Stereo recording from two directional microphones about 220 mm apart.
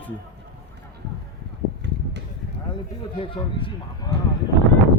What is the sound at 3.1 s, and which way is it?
Speech, 25° left (ahead or behind).